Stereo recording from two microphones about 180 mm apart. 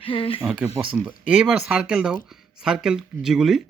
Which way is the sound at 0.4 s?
5° right (ahead or behind).